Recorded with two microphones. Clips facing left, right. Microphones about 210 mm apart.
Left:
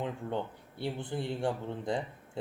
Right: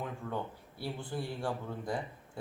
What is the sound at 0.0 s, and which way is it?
Speech, 25° left (ahead or behind).